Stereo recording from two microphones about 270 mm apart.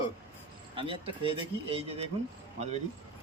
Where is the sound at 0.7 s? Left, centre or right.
Centre.